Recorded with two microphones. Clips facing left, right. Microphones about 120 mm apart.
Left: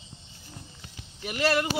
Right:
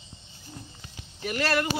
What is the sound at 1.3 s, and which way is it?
Speech, 20° left (ahead or behind).